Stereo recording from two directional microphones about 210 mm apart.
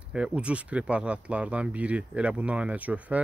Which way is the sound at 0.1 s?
5° right (ahead or behind).